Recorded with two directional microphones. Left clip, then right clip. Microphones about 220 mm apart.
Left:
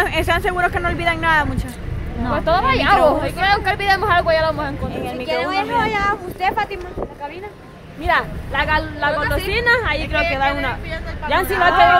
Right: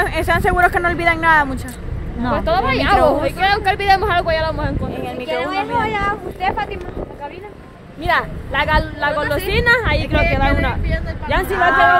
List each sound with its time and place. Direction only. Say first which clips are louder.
0.0 s speech: right 1 dB; 5° left (ahead or behind)
0.6 s speech: right 4 dB; 15° right (ahead or behind)
5.3 s speech: left 1 dB; 50° left (ahead or behind)
8.0 s a woman's voice: even; 35° right (ahead or behind)
10.9 s speech: even; 5° right (ahead or behind)